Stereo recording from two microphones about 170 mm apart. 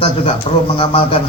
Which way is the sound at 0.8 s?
30° left (ahead or behind).